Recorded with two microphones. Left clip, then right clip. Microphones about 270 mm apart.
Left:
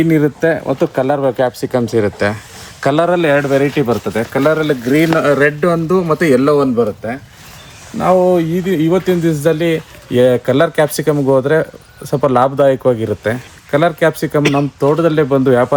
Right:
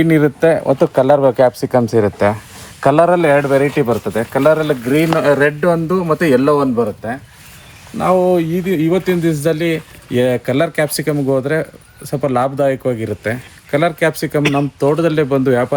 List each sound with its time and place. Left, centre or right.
0.2 s speech: right; by 15.7 s centre